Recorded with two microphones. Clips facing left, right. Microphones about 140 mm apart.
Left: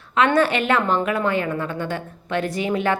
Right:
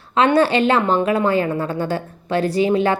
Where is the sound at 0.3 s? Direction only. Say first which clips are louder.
Right 3 dB; 30° right (ahead or behind).